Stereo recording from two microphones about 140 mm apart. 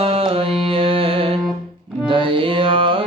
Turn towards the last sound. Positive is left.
turn(degrees=-40)  # may be behind; listen again after turning